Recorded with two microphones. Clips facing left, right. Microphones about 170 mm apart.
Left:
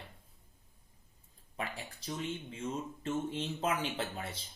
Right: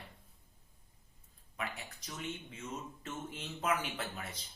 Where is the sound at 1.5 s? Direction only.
30° left (ahead or behind).